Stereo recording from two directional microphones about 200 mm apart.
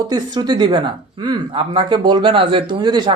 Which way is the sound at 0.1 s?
20° right (ahead or behind).